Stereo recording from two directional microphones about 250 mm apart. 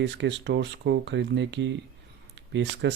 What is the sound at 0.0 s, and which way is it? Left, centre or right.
Speech, right.